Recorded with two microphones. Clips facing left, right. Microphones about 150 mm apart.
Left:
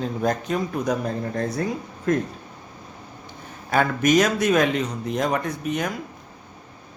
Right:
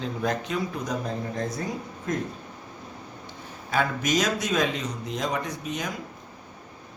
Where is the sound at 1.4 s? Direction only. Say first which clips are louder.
Left 5 dB; 65° left (ahead or behind).